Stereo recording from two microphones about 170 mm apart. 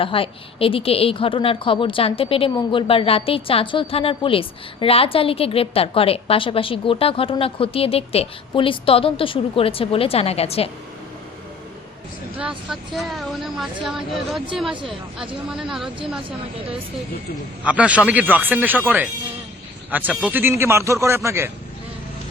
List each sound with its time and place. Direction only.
0.0 s speech: 30° left (ahead or behind)
12.4 s speech: 5° right (ahead or behind)
14.7 s speech: 30° right (ahead or behind)
15.6 s speech: 5° right (ahead or behind)
17.6 s a man's voice: 10° right (ahead or behind)